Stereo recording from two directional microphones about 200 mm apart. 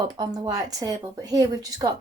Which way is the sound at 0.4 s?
20° right (ahead or behind).